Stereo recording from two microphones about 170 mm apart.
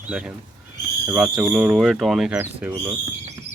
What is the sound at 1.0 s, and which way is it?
Speech, 5° right (ahead or behind).